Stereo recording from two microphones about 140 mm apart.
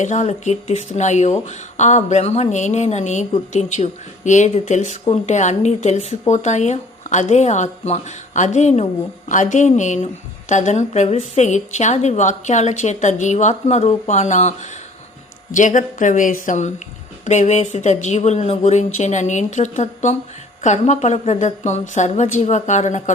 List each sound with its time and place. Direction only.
0.0 s speech: 60° left (ahead or behind)
15.5 s speech: 65° left (ahead or behind)